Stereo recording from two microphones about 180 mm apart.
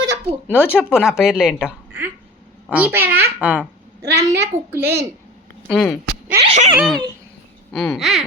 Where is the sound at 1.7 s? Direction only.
10° right (ahead or behind).